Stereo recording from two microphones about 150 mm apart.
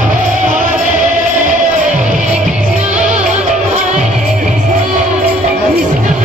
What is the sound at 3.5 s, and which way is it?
Music, 55° right (ahead or behind).